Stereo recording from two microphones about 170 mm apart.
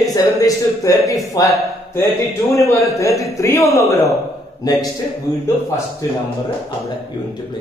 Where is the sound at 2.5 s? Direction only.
15° left (ahead or behind).